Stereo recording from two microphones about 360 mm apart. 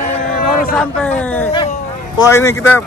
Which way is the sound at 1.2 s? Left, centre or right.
Centre.